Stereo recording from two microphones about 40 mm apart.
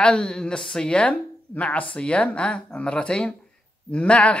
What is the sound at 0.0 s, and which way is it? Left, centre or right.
Speech, left.